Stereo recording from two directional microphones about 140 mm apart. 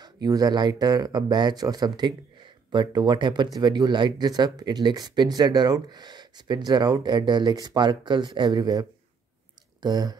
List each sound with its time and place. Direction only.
0.0 s speech: 30° right (ahead or behind)